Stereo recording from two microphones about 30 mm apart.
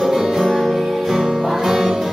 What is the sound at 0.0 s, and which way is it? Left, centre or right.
Music, centre.